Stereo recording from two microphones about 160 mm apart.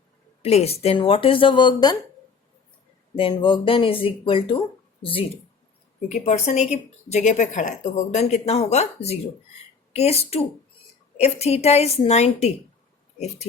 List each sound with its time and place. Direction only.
0.4 s speech: 40° left (ahead or behind)
3.2 s speech: 30° left (ahead or behind)
6.1 s a woman's voice: 40° left (ahead or behind)